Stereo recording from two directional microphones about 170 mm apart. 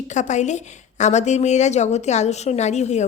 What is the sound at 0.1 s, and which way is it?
A woman's voice, 45° left (ahead or behind).